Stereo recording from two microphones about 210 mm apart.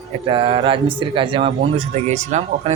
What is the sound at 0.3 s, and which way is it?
Speech, 25° right (ahead or behind).